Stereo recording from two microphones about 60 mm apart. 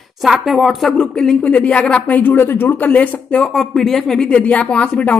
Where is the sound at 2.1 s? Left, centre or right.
Left.